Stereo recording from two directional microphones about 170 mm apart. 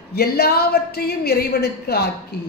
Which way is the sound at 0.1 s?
65° left (ahead or behind).